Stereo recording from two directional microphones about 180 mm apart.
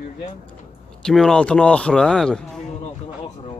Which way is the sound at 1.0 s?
Centre (ahead or behind).